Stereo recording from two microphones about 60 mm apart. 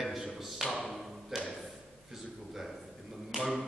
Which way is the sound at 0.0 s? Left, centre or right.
Centre.